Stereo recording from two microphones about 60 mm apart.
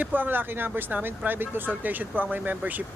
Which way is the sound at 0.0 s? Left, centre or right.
Right.